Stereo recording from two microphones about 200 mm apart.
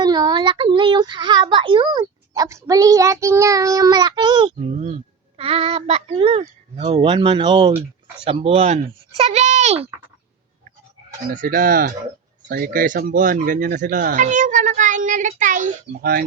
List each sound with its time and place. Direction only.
0.0 s a child's voice: 20° right (ahead or behind)
11.3 s fowl: 45° right (ahead or behind)
12.5 s speech: 45° right (ahead or behind)
15.9 s fowl: 50° right (ahead or behind)